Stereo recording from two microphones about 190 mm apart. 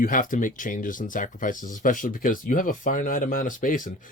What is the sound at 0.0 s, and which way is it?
Speech, 45° left (ahead or behind).